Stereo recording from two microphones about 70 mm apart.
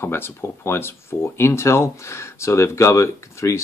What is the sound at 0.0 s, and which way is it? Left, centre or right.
Speech, left.